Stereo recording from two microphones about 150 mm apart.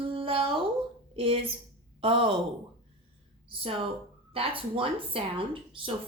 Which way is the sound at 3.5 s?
35° right (ahead or behind).